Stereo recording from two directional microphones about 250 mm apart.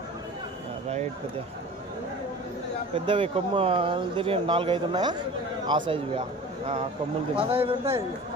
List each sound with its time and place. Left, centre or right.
3.1 s speech: right
7.3 s speech: right